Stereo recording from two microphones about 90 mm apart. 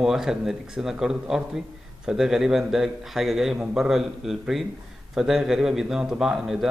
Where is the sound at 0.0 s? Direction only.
5° right (ahead or behind).